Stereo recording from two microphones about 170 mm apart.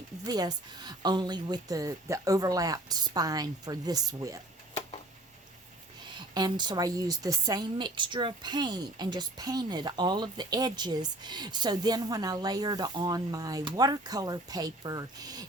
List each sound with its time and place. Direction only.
0.3 s a woman's voice: 25° right (ahead or behind)
6.3 s a woman's voice: 25° right (ahead or behind)